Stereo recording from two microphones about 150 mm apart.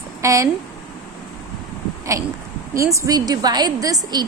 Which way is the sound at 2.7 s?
20° right (ahead or behind).